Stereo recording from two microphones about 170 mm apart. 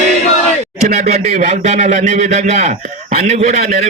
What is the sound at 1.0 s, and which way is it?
Speech, 40° right (ahead or behind).